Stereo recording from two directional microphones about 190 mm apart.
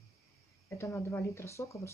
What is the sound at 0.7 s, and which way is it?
Speech, 15° left (ahead or behind).